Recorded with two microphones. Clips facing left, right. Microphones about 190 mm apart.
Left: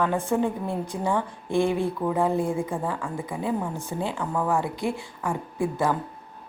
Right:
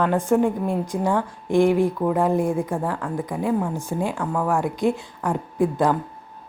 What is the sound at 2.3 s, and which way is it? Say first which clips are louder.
A woman's voice: right 4 dB; 15° right (ahead or behind).